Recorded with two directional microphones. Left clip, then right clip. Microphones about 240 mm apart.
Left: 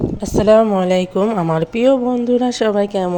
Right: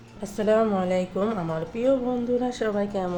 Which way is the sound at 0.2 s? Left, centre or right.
Left.